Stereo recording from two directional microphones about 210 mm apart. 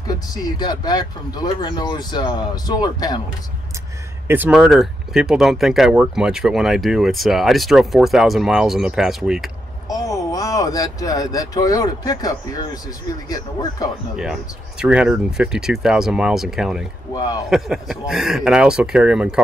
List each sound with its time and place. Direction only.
0.0 s speech: 15° left (ahead or behind)
4.3 s speech: 5° right (ahead or behind)
9.8 s speech: 15° left (ahead or behind)
14.1 s speech: 5° right (ahead or behind)
17.1 s speech: 20° left (ahead or behind)
17.5 s speech: centre (ahead or behind)